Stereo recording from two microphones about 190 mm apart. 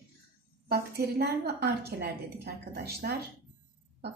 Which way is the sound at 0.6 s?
55° right (ahead or behind).